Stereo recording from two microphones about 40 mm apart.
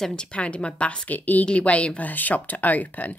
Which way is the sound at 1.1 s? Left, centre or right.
Left.